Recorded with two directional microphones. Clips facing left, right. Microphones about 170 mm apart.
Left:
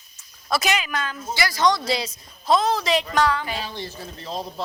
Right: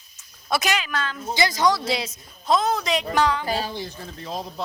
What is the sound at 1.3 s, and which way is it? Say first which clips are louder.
Speech: right 3 dB; 20° right (ahead or behind).